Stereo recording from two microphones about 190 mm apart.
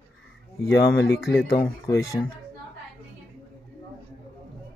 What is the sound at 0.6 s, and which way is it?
Speech, 60° left (ahead or behind).